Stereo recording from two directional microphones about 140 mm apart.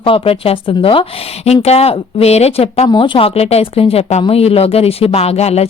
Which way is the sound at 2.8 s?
35° left (ahead or behind).